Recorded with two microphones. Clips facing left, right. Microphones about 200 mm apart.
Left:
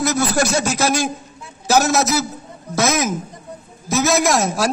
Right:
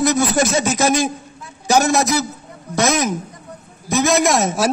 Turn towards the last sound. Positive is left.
turn(degrees=0)  # may be behind; listen again after turning